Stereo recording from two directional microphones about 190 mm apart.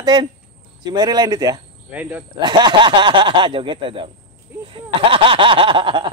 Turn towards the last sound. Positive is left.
turn(degrees=-25)  # may be behind; listen again after turning